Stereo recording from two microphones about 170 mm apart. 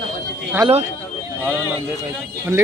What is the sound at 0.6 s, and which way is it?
Speech, 25° right (ahead or behind).